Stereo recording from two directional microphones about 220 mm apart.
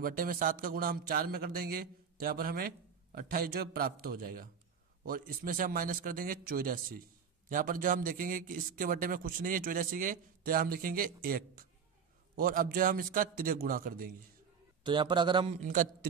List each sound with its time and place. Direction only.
0.0 s a man's voice: 40° right (ahead or behind)
14.8 s a man's voice: 20° right (ahead or behind); by 16.1 s 35° right (ahead or behind)